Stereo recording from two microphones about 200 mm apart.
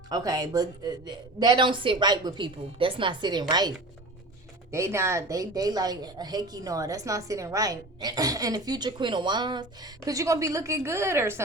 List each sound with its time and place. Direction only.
0.1 s a woman's voice: 20° right (ahead or behind)